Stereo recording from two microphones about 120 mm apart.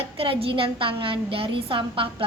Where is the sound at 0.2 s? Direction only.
50° right (ahead or behind).